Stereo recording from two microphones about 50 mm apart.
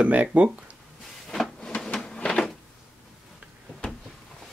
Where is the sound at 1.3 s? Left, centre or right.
Centre.